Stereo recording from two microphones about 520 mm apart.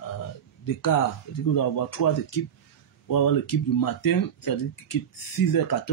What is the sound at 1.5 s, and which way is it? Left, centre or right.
Speech, left.